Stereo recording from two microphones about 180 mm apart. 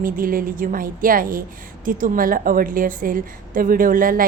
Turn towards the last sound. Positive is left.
turn(degrees=-50)  # may be behind; listen again after turning